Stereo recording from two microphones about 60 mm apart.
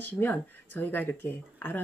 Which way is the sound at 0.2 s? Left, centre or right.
Left.